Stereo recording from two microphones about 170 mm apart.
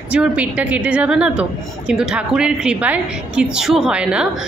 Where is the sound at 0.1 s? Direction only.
5° right (ahead or behind).